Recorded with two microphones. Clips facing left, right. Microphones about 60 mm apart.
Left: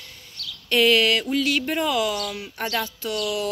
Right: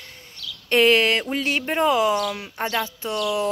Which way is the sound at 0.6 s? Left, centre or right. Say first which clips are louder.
Right 1 dB; right.